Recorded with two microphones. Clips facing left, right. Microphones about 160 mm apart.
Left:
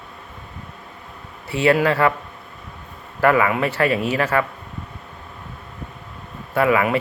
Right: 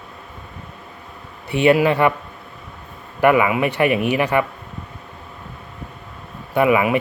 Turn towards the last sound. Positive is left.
turn(degrees=-15)  # may be behind; listen again after turning